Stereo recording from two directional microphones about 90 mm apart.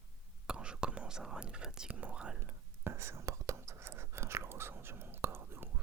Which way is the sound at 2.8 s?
30° right (ahead or behind).